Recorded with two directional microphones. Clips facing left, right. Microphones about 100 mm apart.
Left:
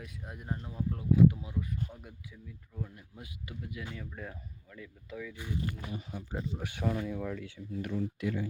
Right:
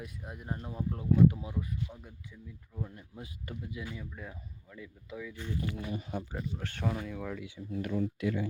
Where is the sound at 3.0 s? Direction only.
30° right (ahead or behind).